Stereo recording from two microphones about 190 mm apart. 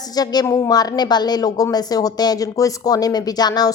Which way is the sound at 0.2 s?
20° left (ahead or behind).